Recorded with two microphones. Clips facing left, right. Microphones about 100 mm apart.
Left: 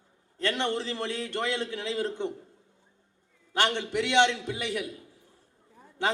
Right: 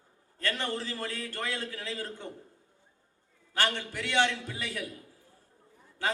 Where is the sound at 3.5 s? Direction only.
25° left (ahead or behind).